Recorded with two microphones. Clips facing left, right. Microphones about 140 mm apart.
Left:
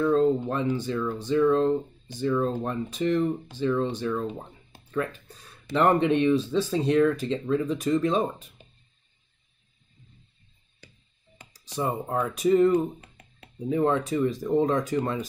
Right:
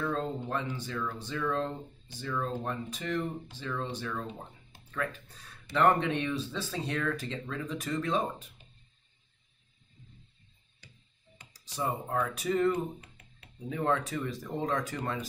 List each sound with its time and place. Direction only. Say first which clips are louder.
0.0 s speech: left 11 dB; 20° left (ahead or behind)
5.7 s speech: left 5 dB; 20° left (ahead or behind)
11.7 s speech: left 5 dB; 25° left (ahead or behind)